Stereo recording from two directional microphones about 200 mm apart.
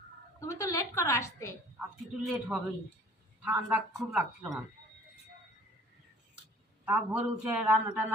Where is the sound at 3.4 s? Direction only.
5° right (ahead or behind).